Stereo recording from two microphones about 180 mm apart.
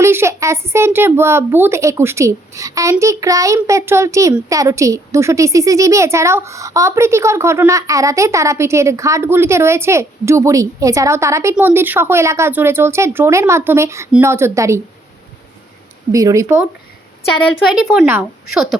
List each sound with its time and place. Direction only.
0.0 s a woman's voice: 15° right (ahead or behind)
16.1 s a woman's voice: 20° right (ahead or behind)
17.7 s a woman's voice: 10° right (ahead or behind)